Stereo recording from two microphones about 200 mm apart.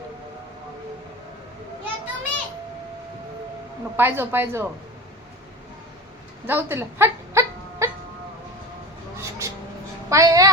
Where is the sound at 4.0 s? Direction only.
10° right (ahead or behind).